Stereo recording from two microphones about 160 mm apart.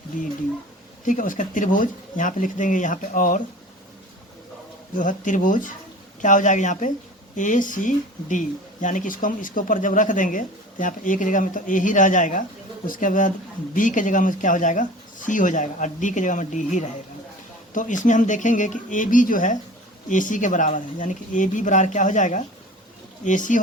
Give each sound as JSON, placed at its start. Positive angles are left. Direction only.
{"t": 0.1, "sound": "speech", "side_deg": 55}
{"t": 4.9, "sound": "speech", "side_deg": 55}